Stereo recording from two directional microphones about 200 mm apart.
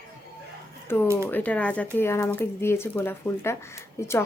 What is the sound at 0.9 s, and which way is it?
Speech, 10° left (ahead or behind).